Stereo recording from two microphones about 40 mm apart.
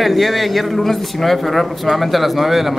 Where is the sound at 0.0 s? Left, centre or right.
Centre.